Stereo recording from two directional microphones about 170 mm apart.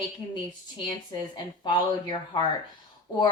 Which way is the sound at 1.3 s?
25° left (ahead or behind).